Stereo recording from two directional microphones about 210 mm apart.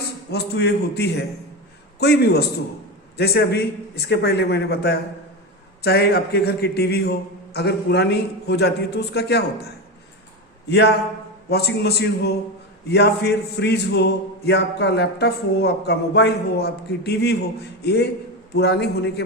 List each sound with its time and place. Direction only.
0.3 s a man's voice: 50° left (ahead or behind)
11.4 s a man's voice: 50° left (ahead or behind)